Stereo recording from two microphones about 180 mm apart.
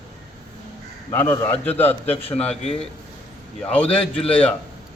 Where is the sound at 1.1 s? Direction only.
15° left (ahead or behind).